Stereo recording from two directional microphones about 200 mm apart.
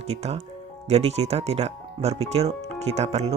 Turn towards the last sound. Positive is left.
turn(degrees=-35)  # may be behind; listen again after turning